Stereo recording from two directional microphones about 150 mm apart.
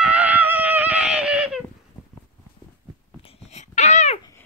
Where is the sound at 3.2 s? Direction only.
45° left (ahead or behind).